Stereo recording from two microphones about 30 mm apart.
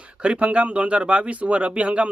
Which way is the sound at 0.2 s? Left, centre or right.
Right.